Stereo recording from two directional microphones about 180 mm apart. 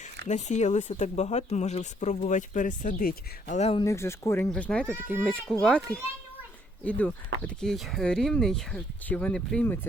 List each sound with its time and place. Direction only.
0.3 s speech: 40° left (ahead or behind)
3.6 s speech: 30° left (ahead or behind)
3.8 s speech: 15° left (ahead or behind)
4.9 s speech: 10° right (ahead or behind)
5.5 s speech: 5° left (ahead or behind)